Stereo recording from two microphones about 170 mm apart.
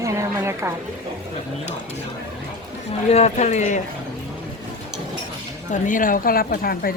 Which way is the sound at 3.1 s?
40° left (ahead or behind).